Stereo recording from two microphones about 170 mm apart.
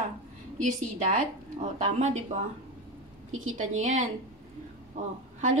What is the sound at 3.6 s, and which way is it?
Speech, 40° right (ahead or behind).